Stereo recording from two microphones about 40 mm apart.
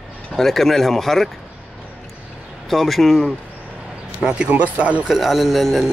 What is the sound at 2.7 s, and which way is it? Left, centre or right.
Speech, centre.